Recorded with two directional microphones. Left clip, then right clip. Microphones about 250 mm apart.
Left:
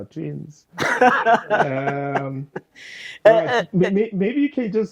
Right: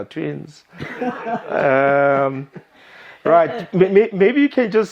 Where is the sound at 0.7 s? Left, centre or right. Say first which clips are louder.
Left 10 dB; centre.